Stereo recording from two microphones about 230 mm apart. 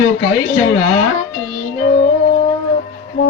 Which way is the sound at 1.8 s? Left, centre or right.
Left.